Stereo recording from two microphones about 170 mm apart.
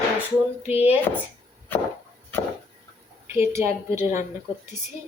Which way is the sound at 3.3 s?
15° right (ahead or behind).